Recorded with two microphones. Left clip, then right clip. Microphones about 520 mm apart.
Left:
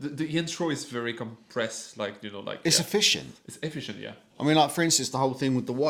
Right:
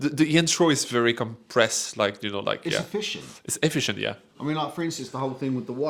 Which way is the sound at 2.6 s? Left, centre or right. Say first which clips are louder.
Left 4 dB; left.